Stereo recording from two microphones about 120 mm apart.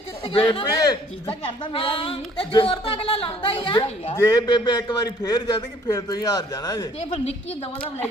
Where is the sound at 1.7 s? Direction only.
45° left (ahead or behind).